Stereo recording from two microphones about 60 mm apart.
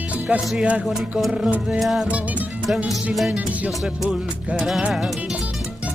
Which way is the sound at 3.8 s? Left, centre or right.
Centre.